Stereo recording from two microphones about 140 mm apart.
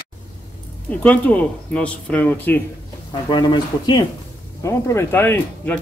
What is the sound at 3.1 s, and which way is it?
Speech, 30° left (ahead or behind).